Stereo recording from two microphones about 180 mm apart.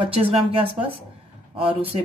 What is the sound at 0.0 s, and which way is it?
Speech, 30° right (ahead or behind).